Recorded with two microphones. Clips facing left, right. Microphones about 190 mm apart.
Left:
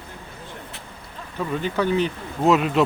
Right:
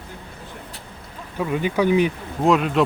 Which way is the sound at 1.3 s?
10° right (ahead or behind).